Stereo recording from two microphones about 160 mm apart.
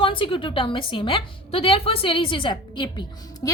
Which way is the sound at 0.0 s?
30° left (ahead or behind).